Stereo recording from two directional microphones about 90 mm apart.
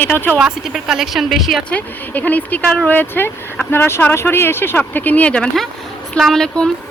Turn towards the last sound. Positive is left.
turn(degrees=5)  # may be behind; listen again after turning